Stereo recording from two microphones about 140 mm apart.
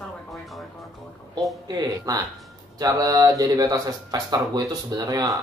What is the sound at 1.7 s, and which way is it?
Speech, 25° right (ahead or behind).